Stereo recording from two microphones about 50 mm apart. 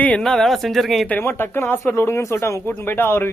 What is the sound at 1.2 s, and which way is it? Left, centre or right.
Speech, left.